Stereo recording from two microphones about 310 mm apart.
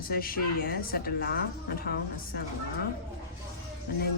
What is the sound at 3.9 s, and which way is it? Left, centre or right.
Speech, left.